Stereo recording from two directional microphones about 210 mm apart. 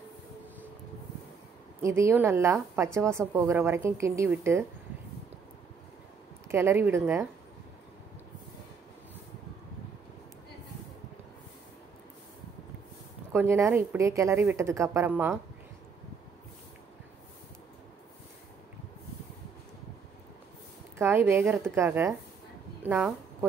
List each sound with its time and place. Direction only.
1.8 s a woman's voice: 15° right (ahead or behind)
6.5 s a woman's voice: 10° right (ahead or behind)
13.3 s a woman's voice: 10° right (ahead or behind)
21.0 s a woman's voice: 10° right (ahead or behind)